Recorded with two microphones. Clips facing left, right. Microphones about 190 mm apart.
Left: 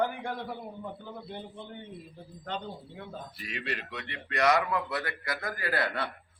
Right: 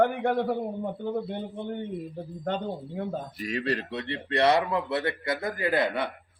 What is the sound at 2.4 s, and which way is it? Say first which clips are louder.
A man's voice: right 7 dB; 45° right (ahead or behind).